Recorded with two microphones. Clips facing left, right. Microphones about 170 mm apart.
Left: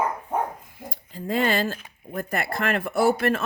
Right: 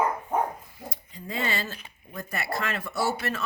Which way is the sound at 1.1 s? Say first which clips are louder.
Left 8 dB; 55° left (ahead or behind).